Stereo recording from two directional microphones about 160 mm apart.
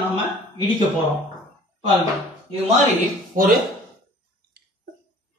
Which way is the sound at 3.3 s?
60° right (ahead or behind).